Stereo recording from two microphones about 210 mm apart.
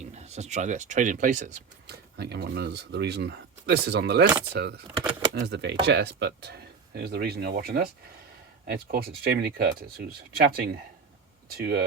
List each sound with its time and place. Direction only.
0.0 s speech: 35° right (ahead or behind); by 11.9 s 50° right (ahead or behind)